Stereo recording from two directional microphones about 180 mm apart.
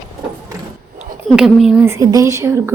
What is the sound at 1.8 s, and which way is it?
Speech, 15° right (ahead or behind).